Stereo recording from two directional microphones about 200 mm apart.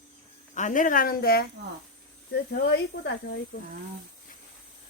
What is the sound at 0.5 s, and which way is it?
Speech, 40° left (ahead or behind).